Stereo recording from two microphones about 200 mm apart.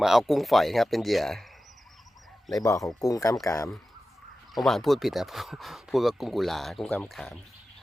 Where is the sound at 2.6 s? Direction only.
15° left (ahead or behind).